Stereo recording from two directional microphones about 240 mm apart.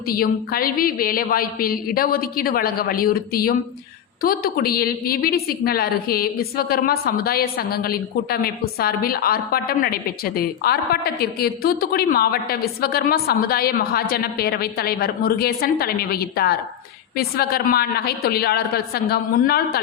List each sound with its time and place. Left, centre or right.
0.1 s a woman's voice: left